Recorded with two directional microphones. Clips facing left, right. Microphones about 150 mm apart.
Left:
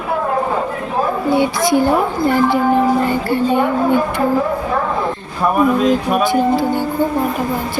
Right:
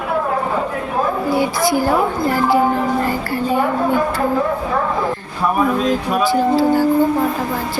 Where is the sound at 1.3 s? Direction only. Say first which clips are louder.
Left 3 dB; 20° left (ahead or behind).